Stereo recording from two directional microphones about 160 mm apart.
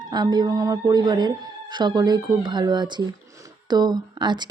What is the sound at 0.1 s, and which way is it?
A woman's voice, 25° right (ahead or behind).